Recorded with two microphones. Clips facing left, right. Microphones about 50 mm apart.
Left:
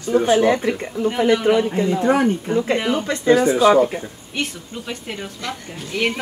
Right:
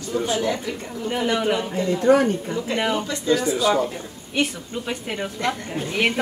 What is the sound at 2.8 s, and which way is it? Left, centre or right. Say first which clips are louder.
Speech: left 1 dB; centre.